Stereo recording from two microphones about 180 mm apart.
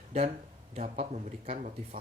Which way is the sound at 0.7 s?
40° right (ahead or behind).